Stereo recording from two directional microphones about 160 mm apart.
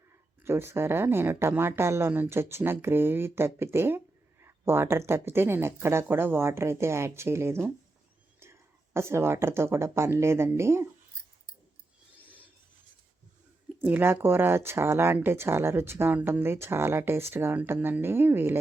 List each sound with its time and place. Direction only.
0.4 s a woman's voice: 15° right (ahead or behind)
13.7 s a woman's voice: 15° right (ahead or behind)